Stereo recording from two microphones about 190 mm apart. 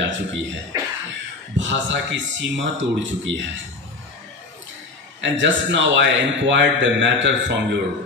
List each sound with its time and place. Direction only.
0.0 s speech: 80° right
0.7 s a sound: 15° right (ahead or behind)
1.6 s a man's voice: 75° right (ahead or behind)
5.2 s a man's voice: 75° right (ahead or behind)